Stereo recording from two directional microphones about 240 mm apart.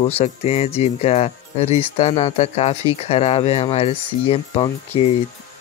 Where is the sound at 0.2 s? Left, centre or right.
Left.